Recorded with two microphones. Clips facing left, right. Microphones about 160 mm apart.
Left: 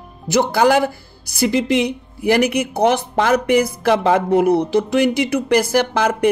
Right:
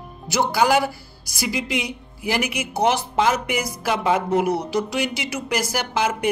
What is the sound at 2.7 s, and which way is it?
Speech, 55° left (ahead or behind).